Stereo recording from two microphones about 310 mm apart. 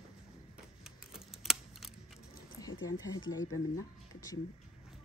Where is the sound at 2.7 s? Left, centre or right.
Left.